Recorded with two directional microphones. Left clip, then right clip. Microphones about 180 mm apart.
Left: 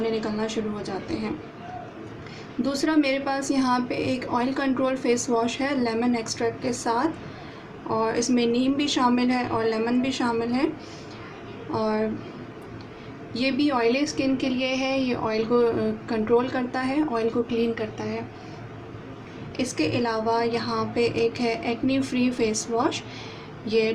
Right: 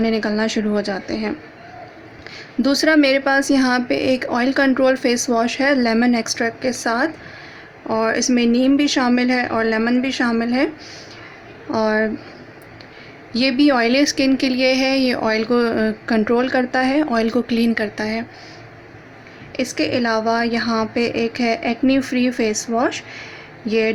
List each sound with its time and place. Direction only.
0.0 s a woman's voice: 45° right (ahead or behind)
2.6 s speech: 45° right (ahead or behind)
11.7 s speech: 40° right (ahead or behind)
13.3 s a woman's voice: 40° right (ahead or behind)
19.5 s speech: 40° right (ahead or behind)